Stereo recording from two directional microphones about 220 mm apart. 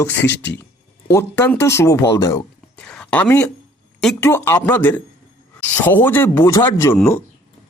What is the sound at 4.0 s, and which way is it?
Speech, 5° left (ahead or behind).